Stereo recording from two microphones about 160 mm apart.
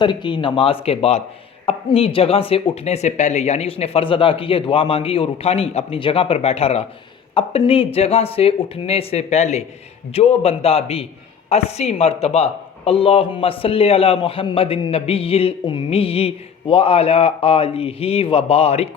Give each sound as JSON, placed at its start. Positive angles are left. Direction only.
{"t": 0.0, "sound": "speech", "side_deg": 30}